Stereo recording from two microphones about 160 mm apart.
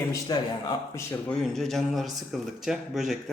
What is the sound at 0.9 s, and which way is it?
Speech, 15° left (ahead or behind).